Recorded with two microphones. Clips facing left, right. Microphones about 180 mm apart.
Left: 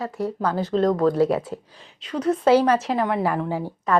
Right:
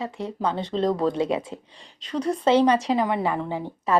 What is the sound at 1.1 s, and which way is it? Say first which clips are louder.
Speech: left 4 dB; 20° right (ahead or behind).